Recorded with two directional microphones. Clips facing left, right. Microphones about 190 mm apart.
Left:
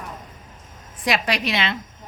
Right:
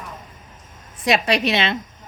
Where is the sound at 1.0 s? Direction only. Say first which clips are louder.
Right 4 dB; 25° right (ahead or behind).